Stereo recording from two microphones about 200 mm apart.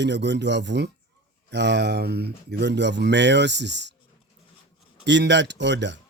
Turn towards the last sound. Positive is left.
turn(degrees=-60)  # may be behind; listen again after turning